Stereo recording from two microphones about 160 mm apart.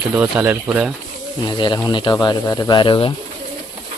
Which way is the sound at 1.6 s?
30° left (ahead or behind).